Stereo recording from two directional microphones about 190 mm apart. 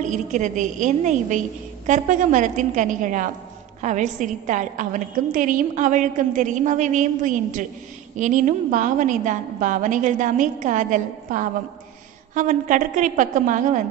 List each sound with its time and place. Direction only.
0.1 s a woman's voice: 40° right (ahead or behind)